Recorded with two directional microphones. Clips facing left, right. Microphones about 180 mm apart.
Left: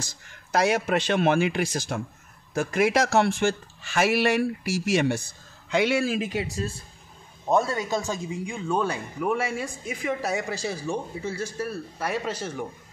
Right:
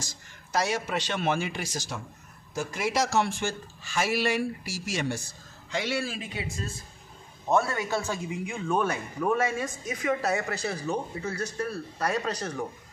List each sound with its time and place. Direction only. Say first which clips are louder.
0.0 s speech: left 3 dB; 60° left (ahead or behind)
7.4 s speech: left 2 dB; 15° left (ahead or behind)